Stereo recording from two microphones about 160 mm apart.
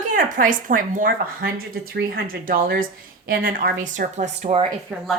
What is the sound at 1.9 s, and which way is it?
Speech, 75° right (ahead or behind).